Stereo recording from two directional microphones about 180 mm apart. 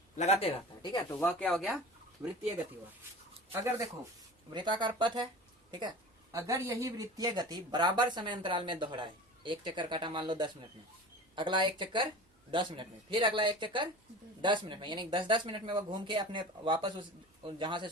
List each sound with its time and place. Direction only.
0.2 s a man's voice: 35° left (ahead or behind)
1.3 s speech: 5° left (ahead or behind)
3.5 s speech: 15° right (ahead or behind)
6.3 s speech: 15° right (ahead or behind)